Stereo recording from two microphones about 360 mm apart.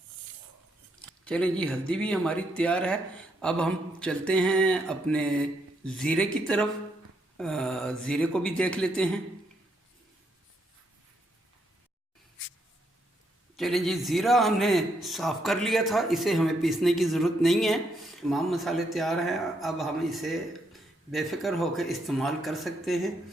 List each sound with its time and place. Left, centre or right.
1.2 s a man's voice: centre
13.6 s a man's voice: centre